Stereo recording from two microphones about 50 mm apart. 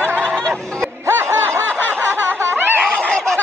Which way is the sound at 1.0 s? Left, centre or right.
Right.